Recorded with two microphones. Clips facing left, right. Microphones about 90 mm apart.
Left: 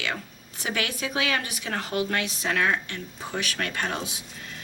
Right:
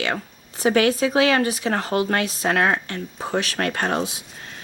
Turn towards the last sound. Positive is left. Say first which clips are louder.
# right 7 dB
turn(degrees=-40)  # may be behind; listen again after turning